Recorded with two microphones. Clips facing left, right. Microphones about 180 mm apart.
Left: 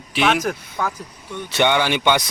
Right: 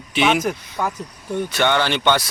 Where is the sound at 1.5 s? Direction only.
15° left (ahead or behind).